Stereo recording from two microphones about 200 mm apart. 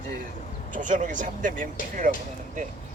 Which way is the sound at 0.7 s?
40° right (ahead or behind).